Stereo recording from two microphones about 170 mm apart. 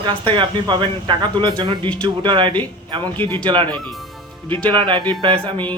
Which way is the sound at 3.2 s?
10° left (ahead or behind).